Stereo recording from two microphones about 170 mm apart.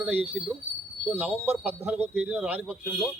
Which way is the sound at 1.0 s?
10° right (ahead or behind).